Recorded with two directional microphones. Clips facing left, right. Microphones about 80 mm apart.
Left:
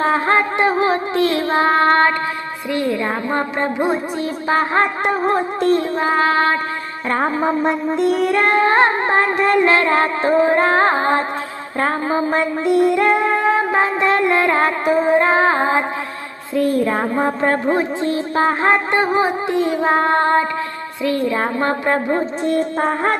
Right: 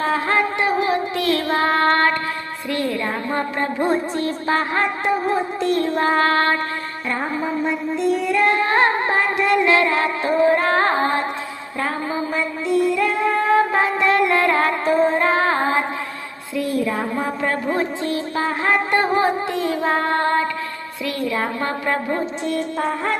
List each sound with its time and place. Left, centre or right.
0.0 s music: left
5.0 s child singing: left
6.0 s child singing: centre
7.1 s child singing: left
8.5 s music: left
11.8 s music: left
13.5 s music: left
14.8 s child singing: centre
15.2 s female singing: left
16.6 s music: left
17.7 s music: left